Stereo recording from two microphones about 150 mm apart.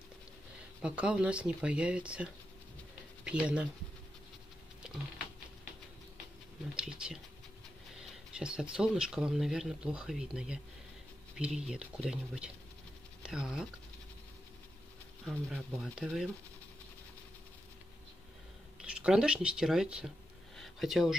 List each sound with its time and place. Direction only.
0.8 s speech: 5° right (ahead or behind)
6.7 s speech: 5° right (ahead or behind)
8.4 s speech: 5° right (ahead or behind)
15.2 s speech: centre (ahead or behind)
18.8 s speech: 5° right (ahead or behind)
20.5 s a sound: centre (ahead or behind)